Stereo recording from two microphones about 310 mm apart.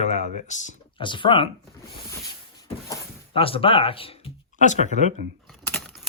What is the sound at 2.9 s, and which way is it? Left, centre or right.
Speech, centre.